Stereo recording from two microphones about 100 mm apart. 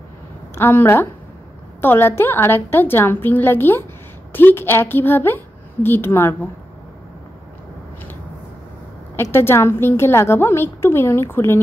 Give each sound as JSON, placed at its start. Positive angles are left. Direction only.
{"t": 0.6, "sound": "a woman's voice", "side_deg": 25}
{"t": 9.1, "sound": "a woman's voice", "side_deg": 25}